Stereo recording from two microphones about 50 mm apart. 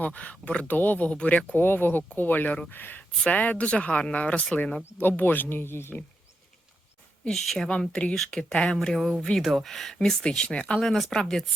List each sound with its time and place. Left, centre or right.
0.0 s speech: left
0.7 s speech: left
1.5 s speech: left
5.0 s speech: left
7.3 s speech: centre
7.7 s speech: left; by 9.1 s centre
9.4 s speech: centre
9.7 s speech: centre
10.8 s speech: centre